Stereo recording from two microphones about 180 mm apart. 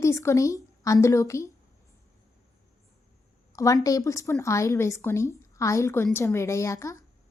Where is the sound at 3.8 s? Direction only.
15° left (ahead or behind).